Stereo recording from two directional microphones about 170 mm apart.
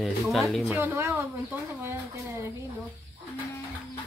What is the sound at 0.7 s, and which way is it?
Speech, 15° right (ahead or behind).